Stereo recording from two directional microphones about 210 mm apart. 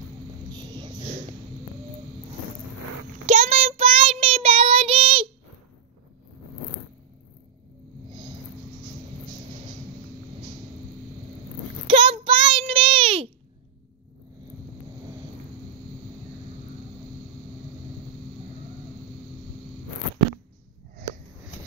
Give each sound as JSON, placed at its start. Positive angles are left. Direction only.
{"t": 0.5, "sound": "vehicle", "side_deg": -20}
{"t": 3.3, "sound": "child singing", "side_deg": -30}
{"t": 11.9, "sound": "child singing", "side_deg": -25}